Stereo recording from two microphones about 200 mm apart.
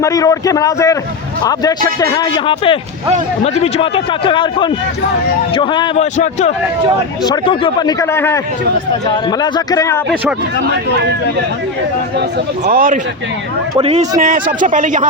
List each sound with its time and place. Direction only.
0.0 s a man's voice: 15° left (ahead or behind)
12.6 s speech: 40° right (ahead or behind)
13.7 s speech: 30° right (ahead or behind)
14.2 s speech: 45° right (ahead or behind)